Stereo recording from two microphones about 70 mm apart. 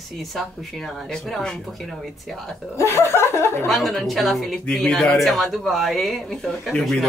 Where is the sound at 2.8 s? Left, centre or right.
Left.